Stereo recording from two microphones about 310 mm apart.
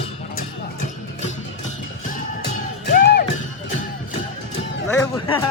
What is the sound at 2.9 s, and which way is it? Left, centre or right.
Music, left.